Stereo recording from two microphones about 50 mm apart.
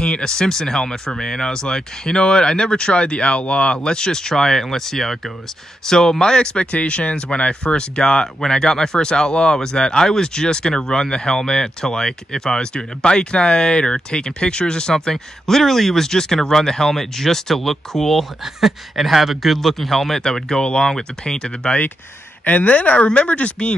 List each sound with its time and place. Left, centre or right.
0.0 s speech: centre
18.4 s speech: centre
22.4 s a woman's voice: left